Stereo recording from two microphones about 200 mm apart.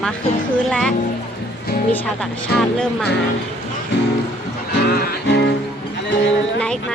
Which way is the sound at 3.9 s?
65° left (ahead or behind).